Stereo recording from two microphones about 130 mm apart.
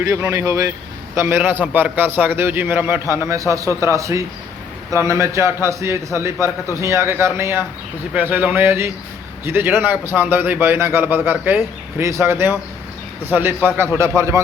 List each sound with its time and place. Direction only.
0.3 s a man's voice: 25° right (ahead or behind)